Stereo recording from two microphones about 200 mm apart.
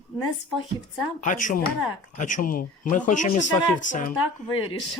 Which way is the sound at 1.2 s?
40° left (ahead or behind).